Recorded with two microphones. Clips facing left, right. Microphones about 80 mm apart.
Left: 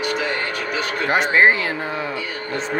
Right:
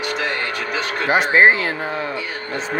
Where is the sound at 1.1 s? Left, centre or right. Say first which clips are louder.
Right 2 dB; centre.